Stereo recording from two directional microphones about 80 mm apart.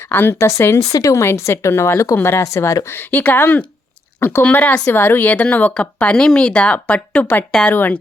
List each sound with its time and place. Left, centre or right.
0.1 s speech: left
4.2 s speech: left
4.5 s a woman's voice: left